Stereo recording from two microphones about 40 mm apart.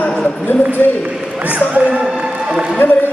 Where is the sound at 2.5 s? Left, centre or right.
Centre.